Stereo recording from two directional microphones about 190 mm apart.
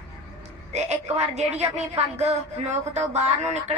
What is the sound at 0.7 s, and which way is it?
A woman's voice, 35° right (ahead or behind).